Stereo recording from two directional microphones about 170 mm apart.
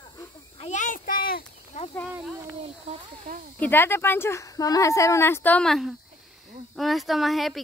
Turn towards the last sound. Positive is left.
turn(degrees=0)  # may be behind; listen again after turning